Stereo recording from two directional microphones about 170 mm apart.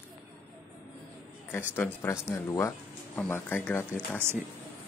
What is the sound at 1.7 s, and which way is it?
Speech, 10° left (ahead or behind).